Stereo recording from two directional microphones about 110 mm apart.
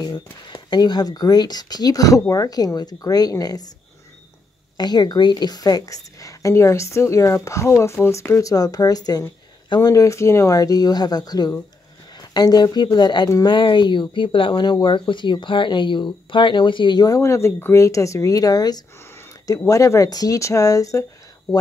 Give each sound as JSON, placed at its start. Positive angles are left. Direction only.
{"t": 0.0, "sound": "a woman's voice", "side_deg": 40}
{"t": 4.7, "sound": "a woman's voice", "side_deg": 40}
{"t": 19.1, "sound": "a sound", "side_deg": 30}
{"t": 19.7, "sound": "speech", "side_deg": 30}